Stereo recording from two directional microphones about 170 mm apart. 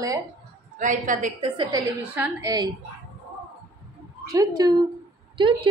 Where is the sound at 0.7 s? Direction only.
50° right (ahead or behind).